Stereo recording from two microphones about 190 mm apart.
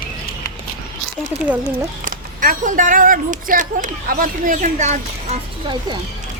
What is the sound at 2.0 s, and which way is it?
Speech, 45° right (ahead or behind).